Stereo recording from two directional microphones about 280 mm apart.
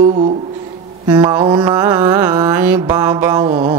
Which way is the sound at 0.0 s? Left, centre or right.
Right.